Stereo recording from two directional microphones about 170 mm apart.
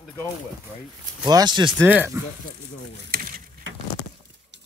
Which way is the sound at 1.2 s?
25° right (ahead or behind).